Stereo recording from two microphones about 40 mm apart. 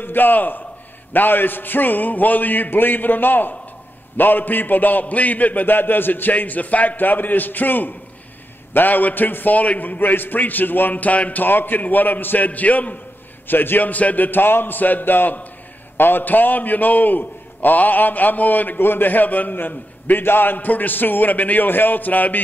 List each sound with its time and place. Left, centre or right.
0.0 s a man's voice: left
11.4 s a man's voice: left
13.5 s a man's voice: left